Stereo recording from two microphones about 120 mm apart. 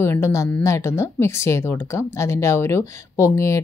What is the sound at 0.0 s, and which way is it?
Speech, 20° left (ahead or behind).